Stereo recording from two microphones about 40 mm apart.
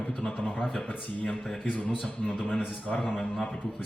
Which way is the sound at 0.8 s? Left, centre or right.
Left.